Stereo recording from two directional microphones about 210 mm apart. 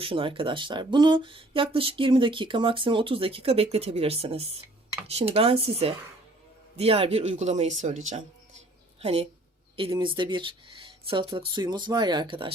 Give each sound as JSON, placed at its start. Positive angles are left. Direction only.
{"t": 0.0, "sound": "speech", "side_deg": -25}